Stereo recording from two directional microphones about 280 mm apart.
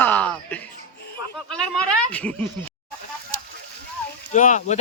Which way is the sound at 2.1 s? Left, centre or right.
Centre.